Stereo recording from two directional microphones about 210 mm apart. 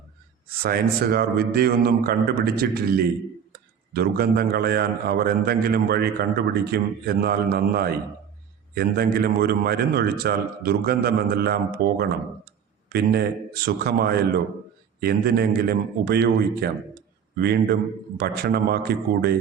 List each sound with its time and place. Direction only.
0.6 s a man's voice: 45° right (ahead or behind)